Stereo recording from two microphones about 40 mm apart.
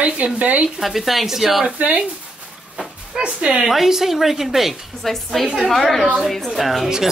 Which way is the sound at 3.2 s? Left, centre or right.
Right.